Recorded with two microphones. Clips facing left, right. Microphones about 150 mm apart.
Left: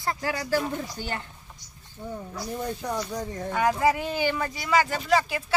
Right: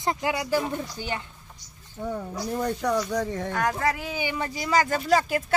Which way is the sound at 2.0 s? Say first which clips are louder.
Right 4 dB; 80° right.